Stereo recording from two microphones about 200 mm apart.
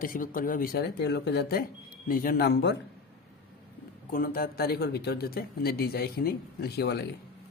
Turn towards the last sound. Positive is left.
turn(degrees=55)  # may be behind; listen again after turning